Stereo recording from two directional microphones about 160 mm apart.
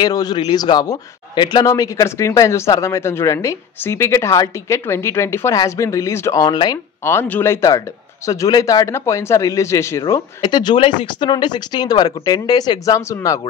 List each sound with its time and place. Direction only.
0.0 s a man's voice: 25° left (ahead or behind)
7.1 s a man's voice: 15° left (ahead or behind)